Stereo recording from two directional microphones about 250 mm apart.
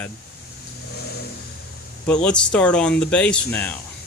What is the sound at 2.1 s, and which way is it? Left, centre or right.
Speech, centre.